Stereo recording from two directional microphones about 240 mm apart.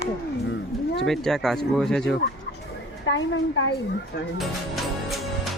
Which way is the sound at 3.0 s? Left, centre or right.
Left.